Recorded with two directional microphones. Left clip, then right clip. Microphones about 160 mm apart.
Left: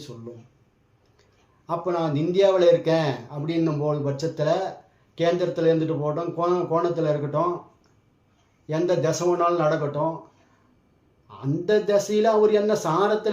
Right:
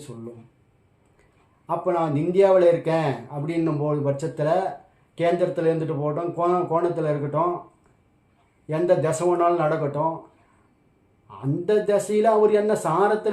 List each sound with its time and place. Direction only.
1.6 s a man's voice: 5° right (ahead or behind)
8.6 s a man's voice: 5° right (ahead or behind)
11.3 s speech: 5° right (ahead or behind)